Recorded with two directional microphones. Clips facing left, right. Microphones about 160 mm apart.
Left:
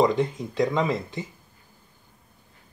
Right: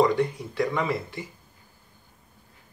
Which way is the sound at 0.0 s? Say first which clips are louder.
Even; 20° left (ahead or behind).